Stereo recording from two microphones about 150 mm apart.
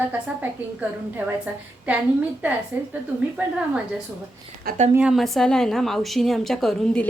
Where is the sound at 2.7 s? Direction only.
15° right (ahead or behind).